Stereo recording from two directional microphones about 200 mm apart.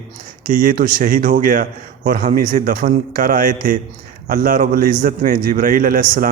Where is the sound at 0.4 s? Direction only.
40° right (ahead or behind).